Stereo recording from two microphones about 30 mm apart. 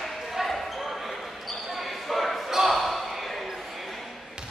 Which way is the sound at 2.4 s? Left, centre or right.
Centre.